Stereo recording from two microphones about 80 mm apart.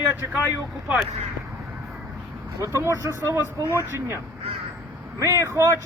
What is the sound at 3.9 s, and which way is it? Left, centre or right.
Speech, right.